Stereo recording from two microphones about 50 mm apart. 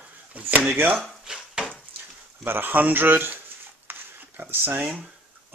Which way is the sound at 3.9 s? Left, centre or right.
Right.